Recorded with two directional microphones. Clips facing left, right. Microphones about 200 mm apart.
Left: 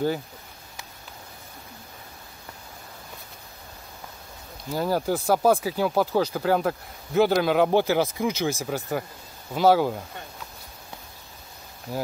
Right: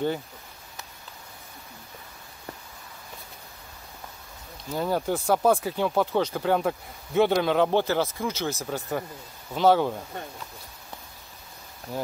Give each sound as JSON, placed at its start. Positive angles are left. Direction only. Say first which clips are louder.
{"t": 4.7, "sound": "speech", "louder": "left 2 dB", "side_deg": 5}
{"t": 11.9, "sound": "speech", "louder": "left 2 dB", "side_deg": 5}